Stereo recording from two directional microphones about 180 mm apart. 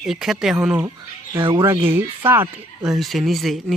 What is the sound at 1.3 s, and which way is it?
Speech, 25° right (ahead or behind).